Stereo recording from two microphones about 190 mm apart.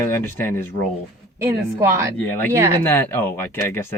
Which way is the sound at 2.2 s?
10° left (ahead or behind).